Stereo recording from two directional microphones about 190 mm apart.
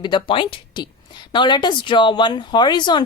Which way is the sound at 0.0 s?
25° left (ahead or behind).